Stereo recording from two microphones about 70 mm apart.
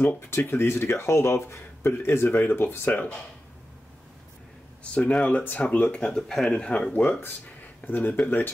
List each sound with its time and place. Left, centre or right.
0.0 s speech: left
4.8 s speech: centre